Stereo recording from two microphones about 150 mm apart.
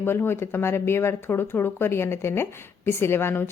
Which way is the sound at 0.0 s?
15° left (ahead or behind).